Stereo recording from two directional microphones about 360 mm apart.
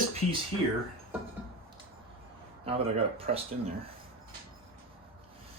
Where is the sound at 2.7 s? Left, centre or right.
Centre.